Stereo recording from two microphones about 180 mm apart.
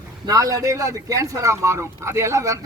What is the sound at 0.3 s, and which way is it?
Speech, 20° right (ahead or behind).